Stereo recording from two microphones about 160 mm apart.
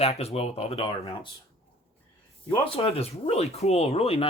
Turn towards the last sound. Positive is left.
turn(degrees=40)  # may be behind; listen again after turning